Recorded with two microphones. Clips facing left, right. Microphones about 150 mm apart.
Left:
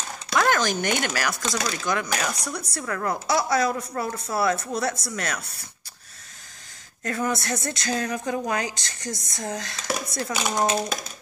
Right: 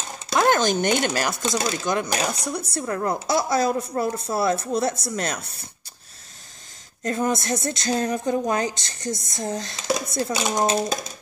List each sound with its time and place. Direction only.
0.3 s speech: 25° right (ahead or behind)
7.0 s speech: 25° right (ahead or behind)